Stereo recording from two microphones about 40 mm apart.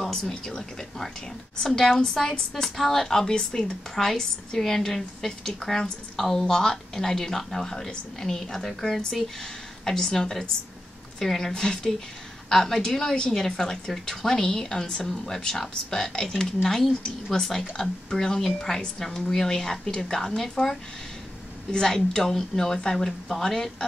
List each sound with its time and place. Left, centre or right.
0.0 s a woman's voice: centre
21.7 s a woman's voice: centre